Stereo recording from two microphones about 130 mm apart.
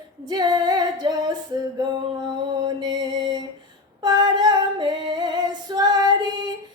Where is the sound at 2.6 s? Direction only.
35° right (ahead or behind).